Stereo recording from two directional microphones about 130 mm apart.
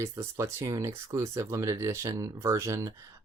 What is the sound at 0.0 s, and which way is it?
Speech, 20° right (ahead or behind).